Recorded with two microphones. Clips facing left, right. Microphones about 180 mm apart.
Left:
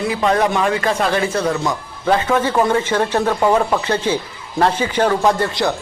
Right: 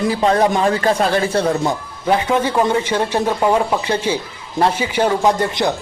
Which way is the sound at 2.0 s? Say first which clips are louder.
Even; 15° right (ahead or behind).